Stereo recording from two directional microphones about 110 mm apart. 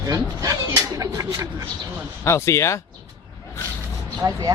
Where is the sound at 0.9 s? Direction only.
30° right (ahead or behind).